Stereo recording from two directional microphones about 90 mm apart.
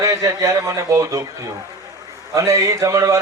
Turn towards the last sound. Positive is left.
turn(degrees=-35)  # may be behind; listen again after turning